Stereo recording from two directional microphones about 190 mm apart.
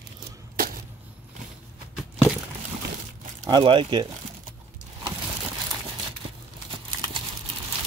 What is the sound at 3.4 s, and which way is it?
Speech, 25° right (ahead or behind).